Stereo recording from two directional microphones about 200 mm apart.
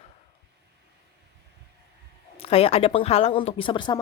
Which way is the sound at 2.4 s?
30° left (ahead or behind).